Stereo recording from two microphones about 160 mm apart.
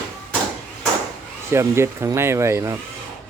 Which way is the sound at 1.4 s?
15° right (ahead or behind).